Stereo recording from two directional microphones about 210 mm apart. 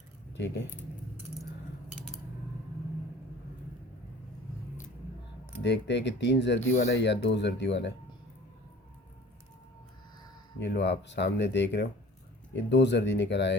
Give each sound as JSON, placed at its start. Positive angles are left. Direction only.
{"t": 0.3, "sound": "speech", "side_deg": 55}
{"t": 5.6, "sound": "speech", "side_deg": 55}
{"t": 10.6, "sound": "speech", "side_deg": 55}